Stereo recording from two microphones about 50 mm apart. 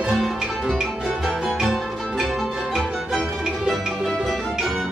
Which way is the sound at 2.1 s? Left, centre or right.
Centre.